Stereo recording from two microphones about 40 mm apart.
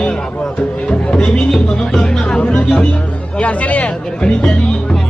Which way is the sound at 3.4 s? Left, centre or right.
Left.